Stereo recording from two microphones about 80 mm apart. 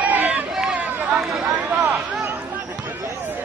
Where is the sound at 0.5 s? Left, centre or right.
Centre.